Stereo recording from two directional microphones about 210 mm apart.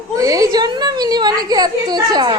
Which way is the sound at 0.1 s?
15° right (ahead or behind).